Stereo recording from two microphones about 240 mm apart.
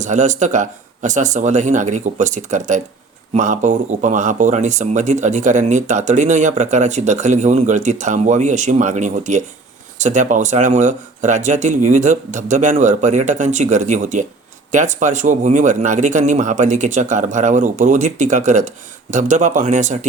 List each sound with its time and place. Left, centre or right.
0.0 s speech: right